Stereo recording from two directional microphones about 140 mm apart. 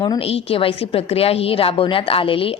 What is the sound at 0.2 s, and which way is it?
A woman's voice, 45° left (ahead or behind).